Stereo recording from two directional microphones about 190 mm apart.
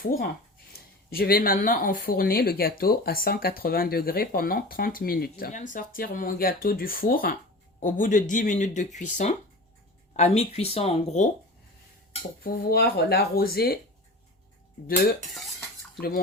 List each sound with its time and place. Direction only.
0.0 s speech: 45° left (ahead or behind)
12.4 s speech: 55° left (ahead or behind)
16.0 s speech: 50° left (ahead or behind)